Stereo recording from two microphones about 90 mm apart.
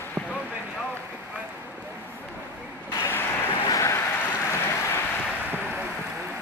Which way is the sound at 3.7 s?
40° left (ahead or behind).